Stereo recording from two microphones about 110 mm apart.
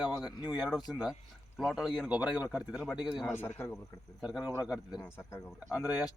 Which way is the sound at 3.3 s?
20° left (ahead or behind).